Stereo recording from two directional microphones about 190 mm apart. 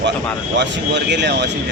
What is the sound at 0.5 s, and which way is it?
Speech, 65° right (ahead or behind).